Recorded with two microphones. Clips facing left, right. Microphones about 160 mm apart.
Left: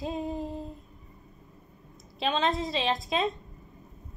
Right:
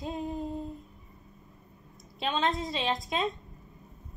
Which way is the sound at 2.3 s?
25° left (ahead or behind).